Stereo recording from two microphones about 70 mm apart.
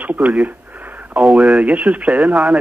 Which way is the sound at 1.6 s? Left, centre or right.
Centre.